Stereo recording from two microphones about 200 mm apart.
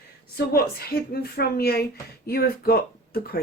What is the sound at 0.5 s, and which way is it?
A woman's voice, 50° left (ahead or behind).